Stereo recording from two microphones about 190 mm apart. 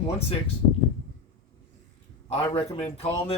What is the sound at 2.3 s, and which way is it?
Speech, 30° left (ahead or behind).